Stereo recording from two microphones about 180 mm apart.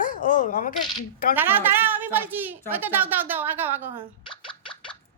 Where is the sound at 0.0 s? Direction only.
50° left (ahead or behind).